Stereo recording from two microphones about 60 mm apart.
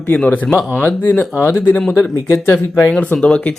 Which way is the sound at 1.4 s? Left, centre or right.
Left.